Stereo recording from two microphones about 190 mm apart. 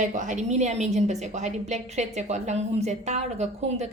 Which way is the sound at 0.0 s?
40° right (ahead or behind).